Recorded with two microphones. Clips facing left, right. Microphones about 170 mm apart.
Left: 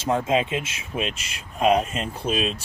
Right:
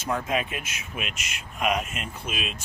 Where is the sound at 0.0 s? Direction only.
25° left (ahead or behind).